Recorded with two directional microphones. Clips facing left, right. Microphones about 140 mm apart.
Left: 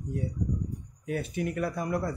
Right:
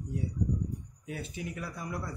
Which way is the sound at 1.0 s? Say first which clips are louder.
Left 8 dB; 55° left (ahead or behind).